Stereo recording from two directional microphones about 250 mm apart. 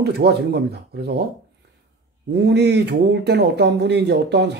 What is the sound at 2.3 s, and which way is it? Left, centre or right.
Speech, right.